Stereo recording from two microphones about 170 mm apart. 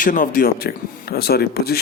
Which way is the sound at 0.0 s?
50° left (ahead or behind).